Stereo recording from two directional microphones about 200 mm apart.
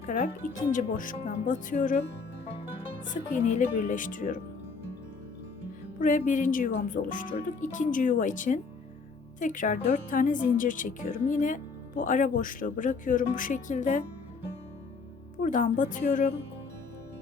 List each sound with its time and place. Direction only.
0.0 s a woman's voice: 40° left (ahead or behind)
6.0 s a woman's voice: 40° left (ahead or behind)
15.4 s a woman's voice: 40° left (ahead or behind)